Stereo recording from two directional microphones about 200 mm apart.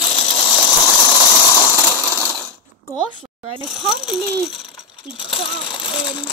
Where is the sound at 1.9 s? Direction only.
10° right (ahead or behind).